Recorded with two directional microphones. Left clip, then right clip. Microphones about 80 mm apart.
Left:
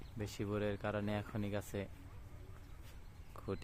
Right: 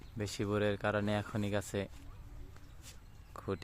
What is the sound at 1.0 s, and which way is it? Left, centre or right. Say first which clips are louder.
Speech: right 6 dB; right.